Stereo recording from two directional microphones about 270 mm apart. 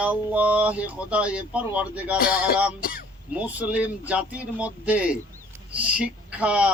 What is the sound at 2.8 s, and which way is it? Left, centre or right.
Throat clearing, left.